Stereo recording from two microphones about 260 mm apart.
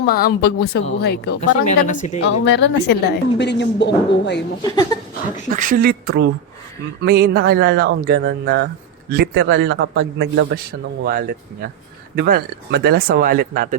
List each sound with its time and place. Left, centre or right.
0.0 s a woman's voice: left
1.6 s speech: left
2.4 s a woman's voice: left
4.6 s speech: centre
5.5 s a man's voice: right